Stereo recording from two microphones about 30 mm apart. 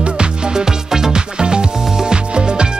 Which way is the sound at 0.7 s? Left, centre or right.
Centre.